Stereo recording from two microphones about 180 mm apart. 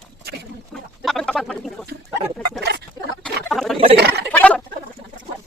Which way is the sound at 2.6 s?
65° right (ahead or behind).